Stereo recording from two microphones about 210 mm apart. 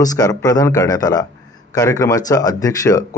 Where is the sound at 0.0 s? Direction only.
15° left (ahead or behind).